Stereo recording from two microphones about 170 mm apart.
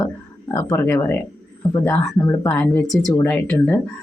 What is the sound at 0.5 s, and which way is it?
Speech, 15° left (ahead or behind).